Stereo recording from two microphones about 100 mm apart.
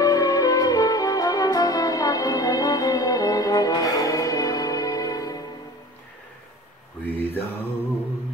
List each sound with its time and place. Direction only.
0.0 s brass instrument: 35° left (ahead or behind)
7.1 s mantra: 20° left (ahead or behind)